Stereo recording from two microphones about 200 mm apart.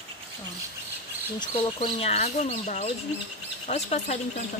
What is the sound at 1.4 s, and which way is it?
Speech, 25° left (ahead or behind).